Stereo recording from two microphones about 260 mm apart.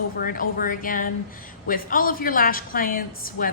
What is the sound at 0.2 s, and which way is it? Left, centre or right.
A woman's voice, left.